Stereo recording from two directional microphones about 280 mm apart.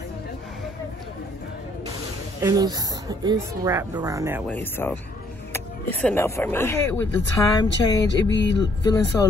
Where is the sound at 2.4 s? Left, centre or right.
Centre.